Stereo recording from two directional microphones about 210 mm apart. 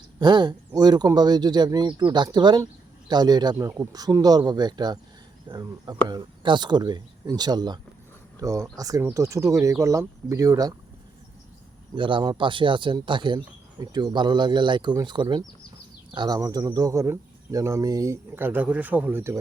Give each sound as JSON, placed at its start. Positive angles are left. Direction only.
{"t": 0.2, "sound": "speech", "side_deg": -20}
{"t": 11.9, "sound": "speech", "side_deg": -25}